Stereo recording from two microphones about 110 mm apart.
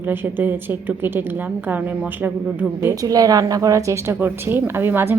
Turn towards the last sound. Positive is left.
turn(degrees=-20)  # may be behind; listen again after turning